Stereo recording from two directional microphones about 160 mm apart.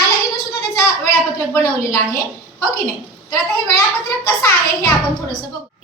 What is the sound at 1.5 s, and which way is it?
Speech, 15° left (ahead or behind).